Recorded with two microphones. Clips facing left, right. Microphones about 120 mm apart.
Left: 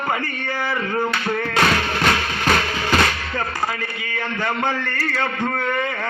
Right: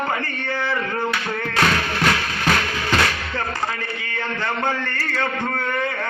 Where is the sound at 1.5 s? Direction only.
15° left (ahead or behind).